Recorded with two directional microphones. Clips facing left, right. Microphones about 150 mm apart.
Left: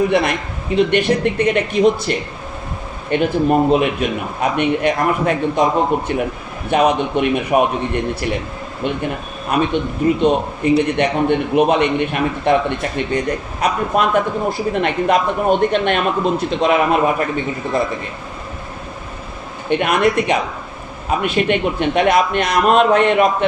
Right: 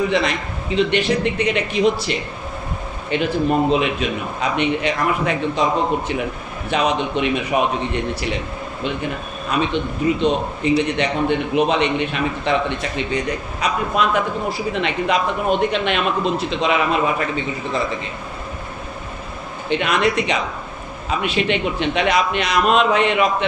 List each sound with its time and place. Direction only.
0.1 s a man's voice: 55° left (ahead or behind)
9.5 s a man's voice: 50° left (ahead or behind)
19.7 s a man's voice: 50° left (ahead or behind)